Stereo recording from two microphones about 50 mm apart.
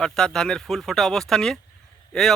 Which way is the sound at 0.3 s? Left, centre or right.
Centre.